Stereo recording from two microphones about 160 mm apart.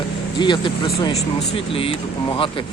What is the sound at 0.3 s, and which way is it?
Speech, 30° left (ahead or behind).